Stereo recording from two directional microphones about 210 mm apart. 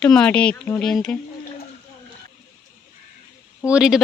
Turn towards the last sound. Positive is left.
turn(degrees=-5)  # may be behind; listen again after turning